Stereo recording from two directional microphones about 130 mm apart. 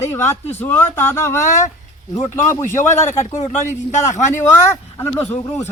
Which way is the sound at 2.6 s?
70° left (ahead or behind).